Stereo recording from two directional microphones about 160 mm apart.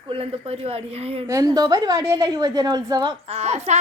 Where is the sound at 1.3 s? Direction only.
20° right (ahead or behind).